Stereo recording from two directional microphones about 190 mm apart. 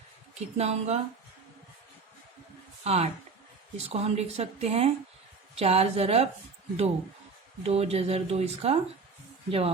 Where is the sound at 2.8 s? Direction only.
35° right (ahead or behind).